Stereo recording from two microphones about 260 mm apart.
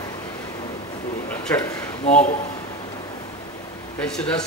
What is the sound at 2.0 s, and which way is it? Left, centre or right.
Speech, left.